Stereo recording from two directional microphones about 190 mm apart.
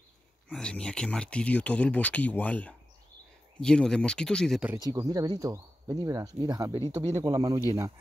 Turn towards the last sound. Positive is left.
turn(degrees=-20)  # may be behind; listen again after turning